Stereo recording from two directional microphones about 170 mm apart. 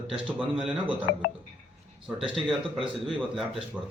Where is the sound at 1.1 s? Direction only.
65° left (ahead or behind).